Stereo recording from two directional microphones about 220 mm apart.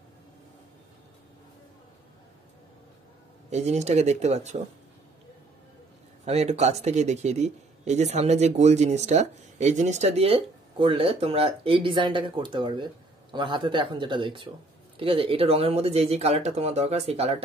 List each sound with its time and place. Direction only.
3.4 s speech: 30° right (ahead or behind)
6.2 s speech: 30° right (ahead or behind)